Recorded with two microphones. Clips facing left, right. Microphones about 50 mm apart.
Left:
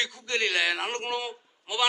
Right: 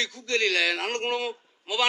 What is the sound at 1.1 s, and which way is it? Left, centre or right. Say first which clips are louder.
Speech: right 3 dB; right.